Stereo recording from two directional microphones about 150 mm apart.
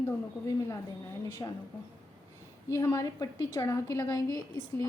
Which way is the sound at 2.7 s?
20° left (ahead or behind).